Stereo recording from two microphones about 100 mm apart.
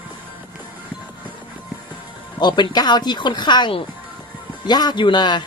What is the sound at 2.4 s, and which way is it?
Speech, 45° left (ahead or behind).